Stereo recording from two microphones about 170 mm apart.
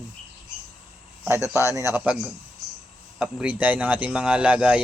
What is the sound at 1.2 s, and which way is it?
Speech, 15° right (ahead or behind).